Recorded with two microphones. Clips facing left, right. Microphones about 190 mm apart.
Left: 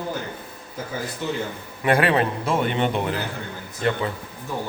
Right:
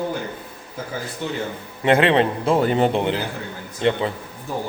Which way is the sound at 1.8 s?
25° right (ahead or behind).